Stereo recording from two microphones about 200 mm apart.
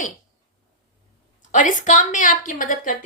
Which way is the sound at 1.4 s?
40° left (ahead or behind).